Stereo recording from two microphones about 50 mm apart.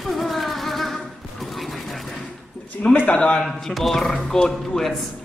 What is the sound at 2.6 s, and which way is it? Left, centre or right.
Speech, left.